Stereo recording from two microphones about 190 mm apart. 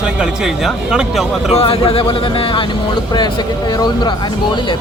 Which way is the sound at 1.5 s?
30° left (ahead or behind).